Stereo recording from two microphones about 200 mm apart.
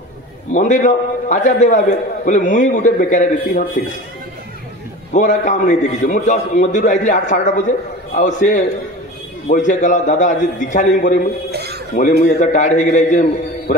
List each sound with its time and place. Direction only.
0.5 s a man's voice: 40° left (ahead or behind)
5.1 s a man's voice: 35° left (ahead or behind)
11.5 s a sound: 55° right (ahead or behind)
11.9 s a man's voice: 40° left (ahead or behind)